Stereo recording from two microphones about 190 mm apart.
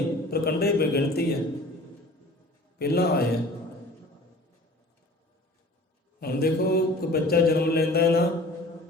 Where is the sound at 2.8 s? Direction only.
55° left (ahead or behind).